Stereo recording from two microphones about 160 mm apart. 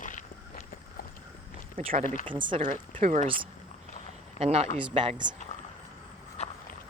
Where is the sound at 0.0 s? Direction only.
55° left (ahead or behind).